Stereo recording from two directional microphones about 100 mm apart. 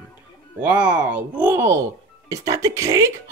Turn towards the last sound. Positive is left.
turn(degrees=-30)  # may be behind; listen again after turning